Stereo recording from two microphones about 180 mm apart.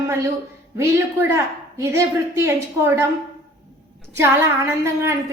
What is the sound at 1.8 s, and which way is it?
A woman's voice, 15° right (ahead or behind).